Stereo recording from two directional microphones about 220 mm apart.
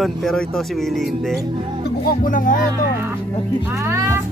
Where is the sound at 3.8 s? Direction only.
10° right (ahead or behind).